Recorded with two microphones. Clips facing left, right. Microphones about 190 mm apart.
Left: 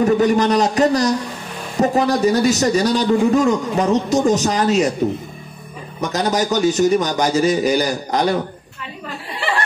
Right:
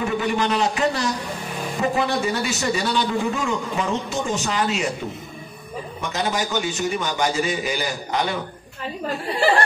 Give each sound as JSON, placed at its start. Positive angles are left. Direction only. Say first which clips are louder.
{"t": 0.0, "sound": "a man's voice", "louder": "left 8 dB", "side_deg": 40}
{"t": 5.9, "sound": "a man's voice", "louder": "left 6 dB", "side_deg": 40}